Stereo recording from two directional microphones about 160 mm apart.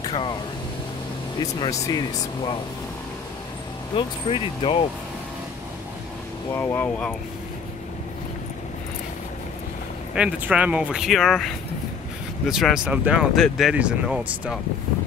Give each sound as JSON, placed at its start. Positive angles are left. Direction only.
{"t": 0.0, "sound": "vehicle", "side_deg": 30}
{"t": 1.4, "sound": "speech", "side_deg": 20}
{"t": 3.9, "sound": "speech", "side_deg": 35}
{"t": 6.5, "sound": "speech", "side_deg": 15}
{"t": 10.1, "sound": "speech", "side_deg": -5}